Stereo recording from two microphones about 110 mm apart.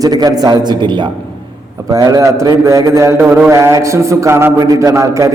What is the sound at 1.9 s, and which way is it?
A man's voice, 35° right (ahead or behind).